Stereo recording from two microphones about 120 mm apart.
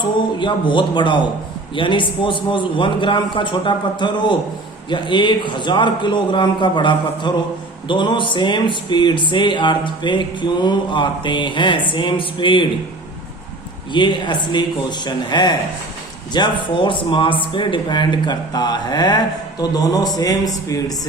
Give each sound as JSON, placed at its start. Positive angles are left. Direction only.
{"t": 0.0, "sound": "a man's voice", "side_deg": 40}
{"t": 13.9, "sound": "speech", "side_deg": 40}